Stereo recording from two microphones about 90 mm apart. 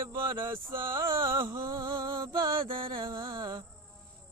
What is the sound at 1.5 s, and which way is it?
Music, 40° right (ahead or behind).